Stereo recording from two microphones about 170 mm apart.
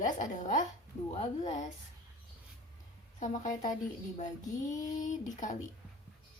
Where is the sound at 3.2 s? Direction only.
50° left (ahead or behind).